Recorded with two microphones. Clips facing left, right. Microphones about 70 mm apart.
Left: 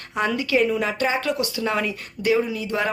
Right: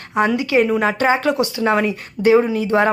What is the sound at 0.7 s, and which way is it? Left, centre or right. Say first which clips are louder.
Speech: right 5 dB; right.